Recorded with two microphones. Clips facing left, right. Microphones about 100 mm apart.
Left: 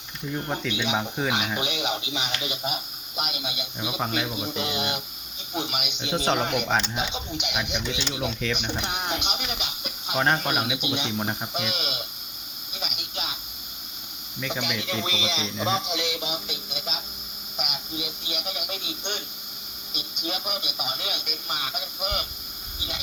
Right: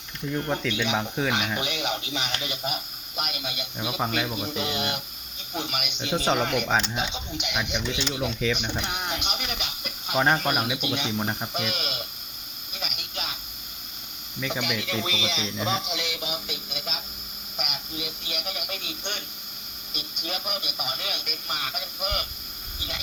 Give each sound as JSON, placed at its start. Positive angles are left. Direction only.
{"t": 0.3, "sound": "speech", "side_deg": 5}
{"t": 6.7, "sound": "speech", "side_deg": 0}
{"t": 6.9, "sound": "speech", "side_deg": 15}
{"t": 8.3, "sound": "speech", "side_deg": -5}
{"t": 8.8, "sound": "speech", "side_deg": 25}
{"t": 9.3, "sound": "speech", "side_deg": 5}
{"t": 12.7, "sound": "a sound", "side_deg": 5}
{"t": 14.4, "sound": "speech", "side_deg": 0}
{"t": 16.6, "sound": "a sound", "side_deg": 5}
{"t": 17.6, "sound": "radio", "side_deg": 10}
{"t": 20.2, "sound": "speech", "side_deg": 5}